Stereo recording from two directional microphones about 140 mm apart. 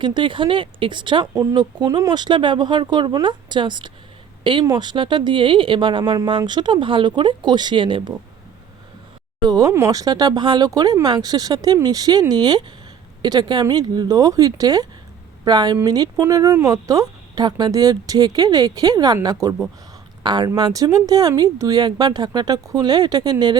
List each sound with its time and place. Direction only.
0.0 s speech: 35° right (ahead or behind)
1.3 s speech: 25° right (ahead or behind)
9.5 s speech: 25° right (ahead or behind)